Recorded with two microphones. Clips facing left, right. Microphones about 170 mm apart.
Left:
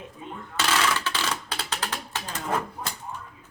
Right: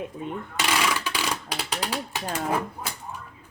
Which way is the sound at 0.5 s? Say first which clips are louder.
Left 1 dB; 15° right (ahead or behind).